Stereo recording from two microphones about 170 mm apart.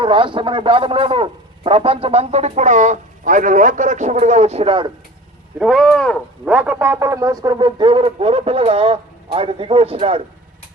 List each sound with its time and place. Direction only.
0.0 s a man's voice: 30° right (ahead or behind)
5.5 s speech: centre (ahead or behind)
6.4 s a man's voice: 10° right (ahead or behind); by 10.2 s 35° right (ahead or behind)